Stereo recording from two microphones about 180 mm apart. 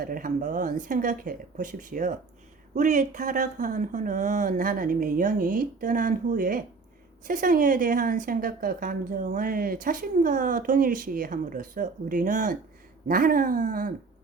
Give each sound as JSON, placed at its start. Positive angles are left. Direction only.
{"t": 0.0, "sound": "speech", "side_deg": -50}